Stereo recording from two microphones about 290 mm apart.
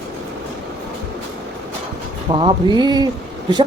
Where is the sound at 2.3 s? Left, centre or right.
Centre.